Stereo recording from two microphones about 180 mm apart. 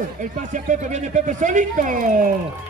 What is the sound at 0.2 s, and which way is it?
Speech, 45° right (ahead or behind).